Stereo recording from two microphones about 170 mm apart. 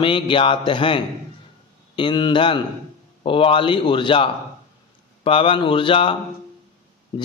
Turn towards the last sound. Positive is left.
turn(degrees=30)  # may be behind; listen again after turning